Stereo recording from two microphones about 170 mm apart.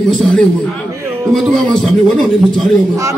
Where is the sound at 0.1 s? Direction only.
5° left (ahead or behind).